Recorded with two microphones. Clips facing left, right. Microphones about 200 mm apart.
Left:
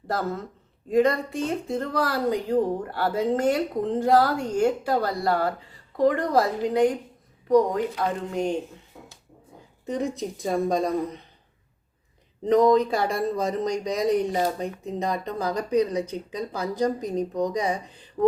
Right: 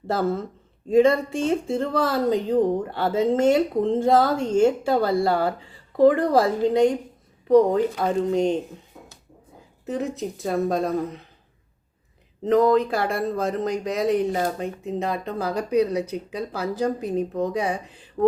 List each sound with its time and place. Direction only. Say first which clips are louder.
0.1 s speech: right 5 dB; 25° right (ahead or behind)
9.8 s speech: right 1 dB; 5° right (ahead or behind)
12.5 s speech: even; centre (ahead or behind)
17.8 s speech: even; 35° left (ahead or behind)